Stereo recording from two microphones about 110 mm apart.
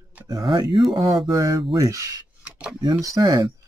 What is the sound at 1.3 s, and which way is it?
Speech, 30° right (ahead or behind).